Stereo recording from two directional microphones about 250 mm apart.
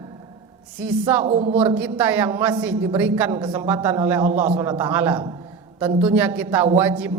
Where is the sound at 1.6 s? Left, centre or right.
Centre.